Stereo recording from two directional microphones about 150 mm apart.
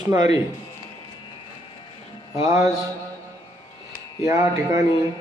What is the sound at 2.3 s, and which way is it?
Speech, 20° right (ahead or behind).